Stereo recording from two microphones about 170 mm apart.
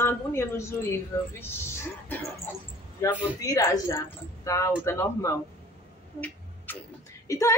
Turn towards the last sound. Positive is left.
turn(degrees=20)  # may be behind; listen again after turning